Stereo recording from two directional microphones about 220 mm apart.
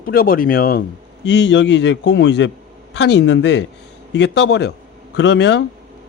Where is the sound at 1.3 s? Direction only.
55° left (ahead or behind).